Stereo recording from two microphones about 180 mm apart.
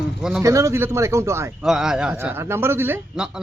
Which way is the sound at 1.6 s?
Centre (ahead or behind).